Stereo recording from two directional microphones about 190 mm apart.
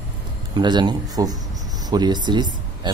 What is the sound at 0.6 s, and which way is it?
Speech, 25° right (ahead or behind).